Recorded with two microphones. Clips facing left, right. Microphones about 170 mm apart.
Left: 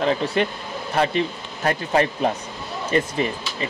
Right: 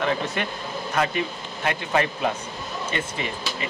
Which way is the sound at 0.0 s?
30° left (ahead or behind).